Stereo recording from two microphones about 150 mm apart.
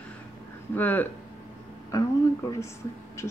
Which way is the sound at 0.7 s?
10° left (ahead or behind).